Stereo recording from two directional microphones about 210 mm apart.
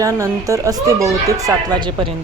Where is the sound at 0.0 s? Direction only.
15° right (ahead or behind).